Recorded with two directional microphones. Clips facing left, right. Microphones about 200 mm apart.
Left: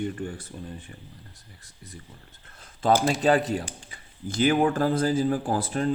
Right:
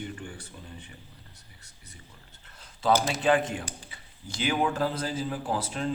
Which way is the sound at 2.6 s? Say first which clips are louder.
Left 3 dB; 50° left (ahead or behind).